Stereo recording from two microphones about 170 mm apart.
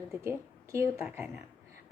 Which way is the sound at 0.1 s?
15° right (ahead or behind).